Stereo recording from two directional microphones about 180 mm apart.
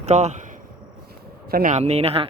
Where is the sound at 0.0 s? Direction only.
40° right (ahead or behind).